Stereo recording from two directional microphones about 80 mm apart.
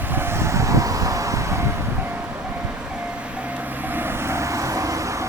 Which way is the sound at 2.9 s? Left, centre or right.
Centre.